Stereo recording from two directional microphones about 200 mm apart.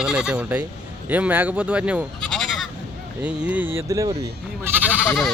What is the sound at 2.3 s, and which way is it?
Honk, centre (ahead or behind).